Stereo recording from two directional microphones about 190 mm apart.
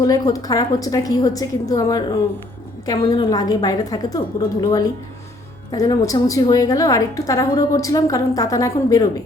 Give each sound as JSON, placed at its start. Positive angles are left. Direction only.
{"t": 0.0, "sound": "a woman's voice", "side_deg": 20}